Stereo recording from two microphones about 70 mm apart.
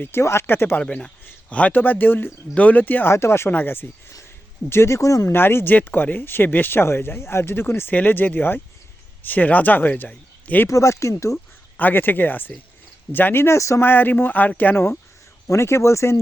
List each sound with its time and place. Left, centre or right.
0.0 s speech: left
0.8 s speech: centre; by 3.8 s left
4.7 s speech: left
5.3 s speech: left
10.1 s a sound: left
10.7 s speech: left
11.8 s speech: left
13.8 s speech: left
15.4 s speech: left